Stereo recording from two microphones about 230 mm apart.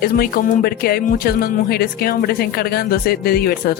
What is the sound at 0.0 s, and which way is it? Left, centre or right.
Speech, left.